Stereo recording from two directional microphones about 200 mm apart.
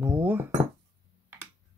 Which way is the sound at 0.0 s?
10° right (ahead or behind).